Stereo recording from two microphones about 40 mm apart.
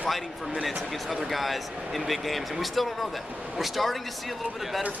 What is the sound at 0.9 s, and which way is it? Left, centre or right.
Speech, centre.